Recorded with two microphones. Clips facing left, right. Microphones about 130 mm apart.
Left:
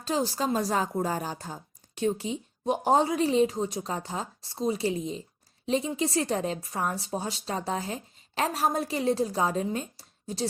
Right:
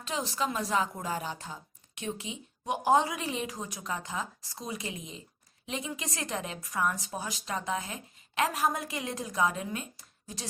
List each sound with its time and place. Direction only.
0.0 s speech: 35° left (ahead or behind)